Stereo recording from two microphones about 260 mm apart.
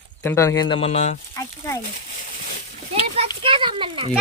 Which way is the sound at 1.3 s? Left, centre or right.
Centre.